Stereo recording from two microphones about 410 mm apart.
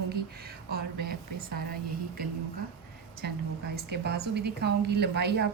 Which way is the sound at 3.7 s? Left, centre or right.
Right.